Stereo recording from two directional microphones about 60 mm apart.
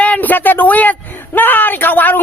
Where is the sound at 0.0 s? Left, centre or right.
Left.